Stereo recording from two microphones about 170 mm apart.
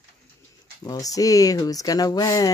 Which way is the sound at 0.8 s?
20° left (ahead or behind).